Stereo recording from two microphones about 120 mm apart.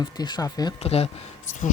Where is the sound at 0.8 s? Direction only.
60° left (ahead or behind); by 1.7 s 90° left.